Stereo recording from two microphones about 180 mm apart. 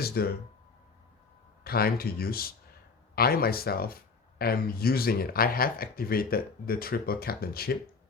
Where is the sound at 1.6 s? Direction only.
60° left (ahead or behind).